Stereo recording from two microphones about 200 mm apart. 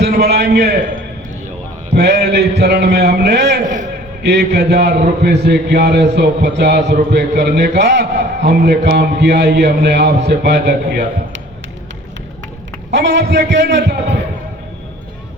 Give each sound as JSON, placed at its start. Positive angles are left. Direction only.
{"t": 0.0, "sound": "a man's voice", "side_deg": -55}
{"t": 2.0, "sound": "a man's voice", "side_deg": -55}
{"t": 12.9, "sound": "a man's voice", "side_deg": -60}